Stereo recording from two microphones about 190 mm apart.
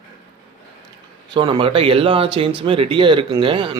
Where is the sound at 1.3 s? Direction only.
25° right (ahead or behind).